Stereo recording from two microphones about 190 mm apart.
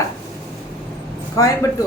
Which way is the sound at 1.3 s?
20° left (ahead or behind).